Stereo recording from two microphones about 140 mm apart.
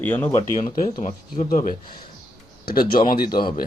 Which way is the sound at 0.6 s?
60° left (ahead or behind).